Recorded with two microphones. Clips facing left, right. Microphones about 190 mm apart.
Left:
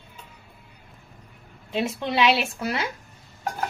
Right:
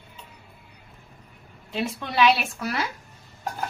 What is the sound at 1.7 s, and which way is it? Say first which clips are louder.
Speech: left 3 dB; 20° left (ahead or behind).